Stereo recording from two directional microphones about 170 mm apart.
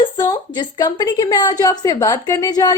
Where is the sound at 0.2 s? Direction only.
25° left (ahead or behind).